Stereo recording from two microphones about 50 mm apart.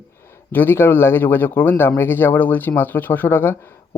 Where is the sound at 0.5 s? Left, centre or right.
Left.